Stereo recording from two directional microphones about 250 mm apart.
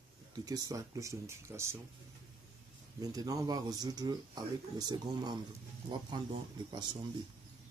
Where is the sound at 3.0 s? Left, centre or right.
Centre.